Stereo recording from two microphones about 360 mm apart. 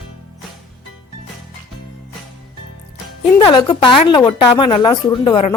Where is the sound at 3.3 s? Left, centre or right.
Centre.